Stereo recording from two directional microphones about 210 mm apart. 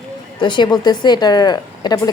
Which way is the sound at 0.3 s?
20° left (ahead or behind).